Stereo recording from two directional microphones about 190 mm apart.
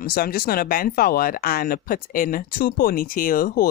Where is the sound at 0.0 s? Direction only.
50° left (ahead or behind).